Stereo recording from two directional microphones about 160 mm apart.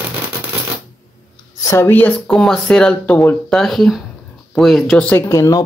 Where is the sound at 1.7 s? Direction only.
15° left (ahead or behind).